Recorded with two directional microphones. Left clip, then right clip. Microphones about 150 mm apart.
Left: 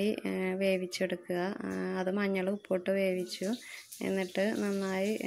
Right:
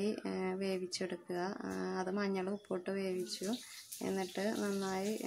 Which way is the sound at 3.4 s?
Centre (ahead or behind).